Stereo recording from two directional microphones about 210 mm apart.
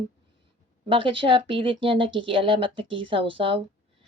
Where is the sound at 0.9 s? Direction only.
25° right (ahead or behind).